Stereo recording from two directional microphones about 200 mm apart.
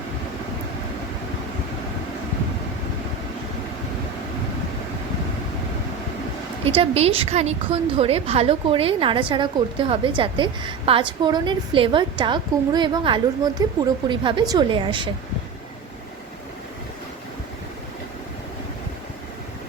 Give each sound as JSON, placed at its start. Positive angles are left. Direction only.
{"t": 6.7, "sound": "a woman's voice", "side_deg": -30}